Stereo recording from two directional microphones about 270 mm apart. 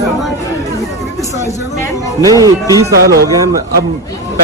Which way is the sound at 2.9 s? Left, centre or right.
Right.